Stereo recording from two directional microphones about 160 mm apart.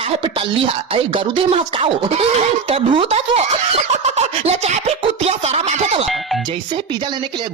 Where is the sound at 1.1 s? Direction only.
35° right (ahead or behind).